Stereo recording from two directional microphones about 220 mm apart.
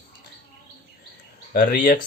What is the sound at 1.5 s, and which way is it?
Speech, 40° left (ahead or behind).